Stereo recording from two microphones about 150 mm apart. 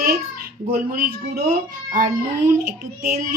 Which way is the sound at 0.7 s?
85° right.